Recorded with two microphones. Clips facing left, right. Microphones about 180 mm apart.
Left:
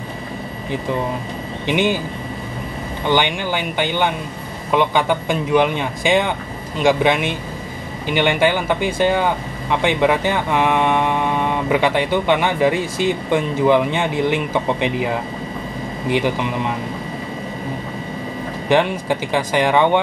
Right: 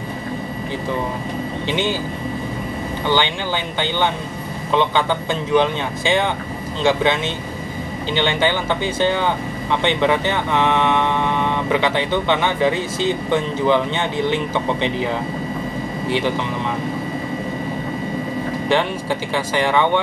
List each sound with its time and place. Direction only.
1.7 s speech: 15° left (ahead or behind)
3.1 s speech: 15° left (ahead or behind)
16.1 s speech: 15° left (ahead or behind)
18.7 s speech: 15° left (ahead or behind)